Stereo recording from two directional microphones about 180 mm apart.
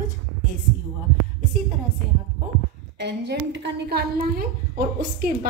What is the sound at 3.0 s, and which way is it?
A woman's voice, 70° right (ahead or behind).